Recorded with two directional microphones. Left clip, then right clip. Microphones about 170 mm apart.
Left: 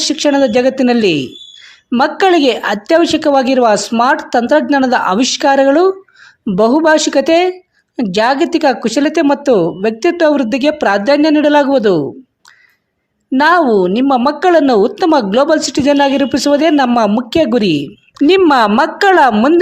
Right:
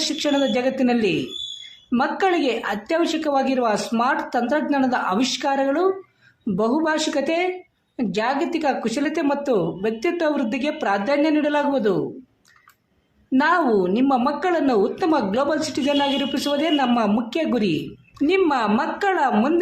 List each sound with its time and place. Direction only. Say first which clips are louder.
0.0 s a woman's voice: left 9 dB; 45° left (ahead or behind)
13.3 s a woman's voice: left 9 dB; 50° left (ahead or behind)